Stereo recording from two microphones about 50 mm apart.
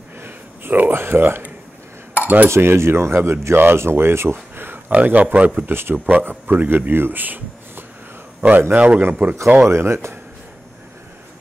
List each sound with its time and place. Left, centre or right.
0.2 s a sound: right
2.1 s cutlery: right
2.5 s speech: right
5.0 s speech: right
5.7 s speech: right
6.0 s a man's voice: right
8.7 s a man's voice: right
9.6 s speech: right